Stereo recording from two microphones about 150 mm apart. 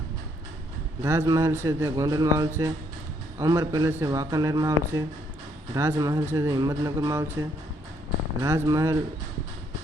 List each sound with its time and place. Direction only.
1.0 s speech: 20° right (ahead or behind)
8.4 s speech: 20° right (ahead or behind)